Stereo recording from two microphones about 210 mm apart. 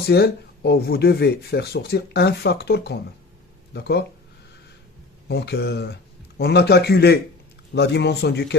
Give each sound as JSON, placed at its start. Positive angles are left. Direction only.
{"t": 0.0, "sound": "speech", "side_deg": 50}
{"t": 5.3, "sound": "speech", "side_deg": 50}